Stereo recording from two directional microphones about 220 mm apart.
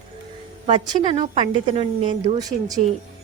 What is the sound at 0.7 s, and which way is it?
A woman's voice, 25° right (ahead or behind).